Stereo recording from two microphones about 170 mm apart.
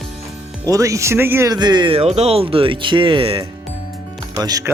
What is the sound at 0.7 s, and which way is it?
Speech, 20° right (ahead or behind).